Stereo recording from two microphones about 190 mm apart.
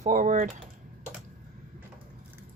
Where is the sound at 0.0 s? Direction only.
40° right (ahead or behind).